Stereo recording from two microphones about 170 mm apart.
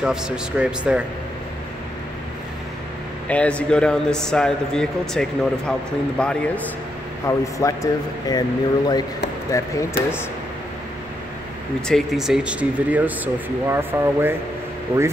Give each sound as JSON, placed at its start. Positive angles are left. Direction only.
{"t": 0.0, "sound": "a man's voice", "side_deg": -5}
{"t": 3.3, "sound": "a man's voice", "side_deg": 5}
{"t": 7.2, "sound": "speech", "side_deg": 20}
{"t": 11.9, "sound": "speech", "side_deg": 0}